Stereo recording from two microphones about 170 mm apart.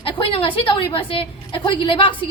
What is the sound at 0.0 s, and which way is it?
A woman's voice, 30° left (ahead or behind).